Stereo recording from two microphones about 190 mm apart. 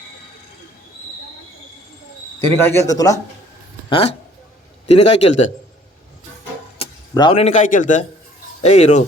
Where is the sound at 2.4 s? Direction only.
15° left (ahead or behind).